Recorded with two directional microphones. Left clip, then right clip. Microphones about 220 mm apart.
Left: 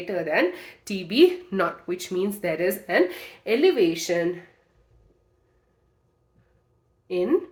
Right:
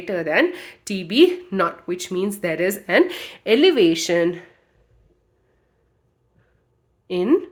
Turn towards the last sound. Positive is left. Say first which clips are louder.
# right 4 dB
turn(degrees=-55)  # may be behind; listen again after turning